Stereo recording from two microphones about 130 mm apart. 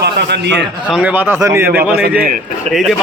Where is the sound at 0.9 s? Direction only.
10° right (ahead or behind).